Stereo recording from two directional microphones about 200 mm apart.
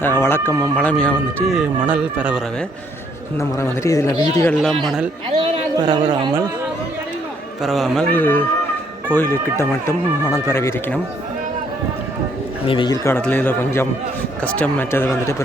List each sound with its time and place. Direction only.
0.0 s speech: 10° left (ahead or behind); by 2.4 s 5° right (ahead or behind)
3.3 s speech: 15° left (ahead or behind)
4.5 s speech: centre (ahead or behind)
5.3 s a sound: 25° right (ahead or behind)
6.2 s speech: 25° right (ahead or behind)
7.6 s speech: centre (ahead or behind)
12.6 s speech: 25° left (ahead or behind)
13.1 s speech: 10° left (ahead or behind)